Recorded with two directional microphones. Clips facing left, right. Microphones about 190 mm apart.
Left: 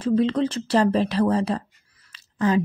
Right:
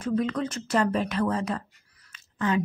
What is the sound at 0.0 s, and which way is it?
Speech, 30° left (ahead or behind).